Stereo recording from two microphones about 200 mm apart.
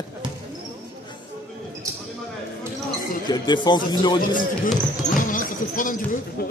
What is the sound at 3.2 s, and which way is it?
A man's voice, 20° left (ahead or behind).